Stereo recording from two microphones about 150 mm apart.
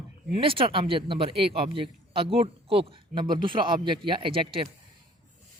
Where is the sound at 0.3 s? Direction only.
35° right (ahead or behind).